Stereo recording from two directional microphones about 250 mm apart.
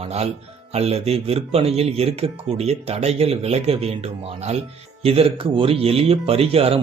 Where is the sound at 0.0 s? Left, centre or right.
Right.